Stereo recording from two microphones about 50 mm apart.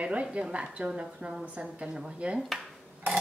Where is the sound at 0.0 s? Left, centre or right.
Right.